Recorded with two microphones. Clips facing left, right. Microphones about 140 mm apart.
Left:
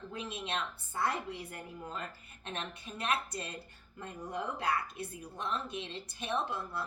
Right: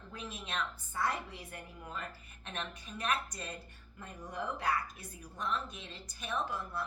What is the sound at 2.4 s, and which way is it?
Speech, 30° left (ahead or behind).